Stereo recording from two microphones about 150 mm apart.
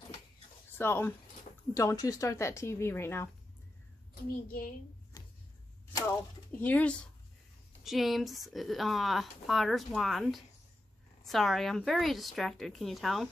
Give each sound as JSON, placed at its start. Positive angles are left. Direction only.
{"t": 0.7, "sound": "speech", "side_deg": 15}
{"t": 4.1, "sound": "a child's voice", "side_deg": 75}
{"t": 5.1, "sound": "a sound", "side_deg": 20}
{"t": 6.6, "sound": "speech", "side_deg": 10}
{"t": 7.8, "sound": "speech", "side_deg": 0}